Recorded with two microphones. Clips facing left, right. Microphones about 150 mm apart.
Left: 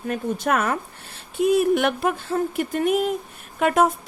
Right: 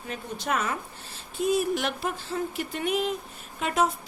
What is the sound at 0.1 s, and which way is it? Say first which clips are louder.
A woman's voice: left 7 dB; 55° left (ahead or behind).